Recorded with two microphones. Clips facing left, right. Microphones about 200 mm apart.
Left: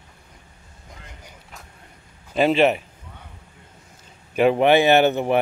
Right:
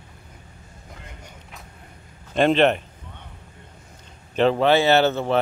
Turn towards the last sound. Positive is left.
turn(degrees=15)  # may be behind; listen again after turning